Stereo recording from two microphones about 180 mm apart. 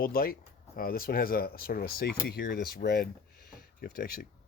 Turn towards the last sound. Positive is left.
turn(degrees=55)  # may be behind; listen again after turning